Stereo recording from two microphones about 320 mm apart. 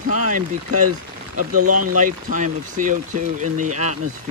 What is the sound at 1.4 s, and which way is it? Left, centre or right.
Speech, right.